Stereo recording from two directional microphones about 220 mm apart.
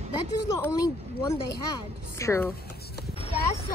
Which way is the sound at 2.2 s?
10° left (ahead or behind).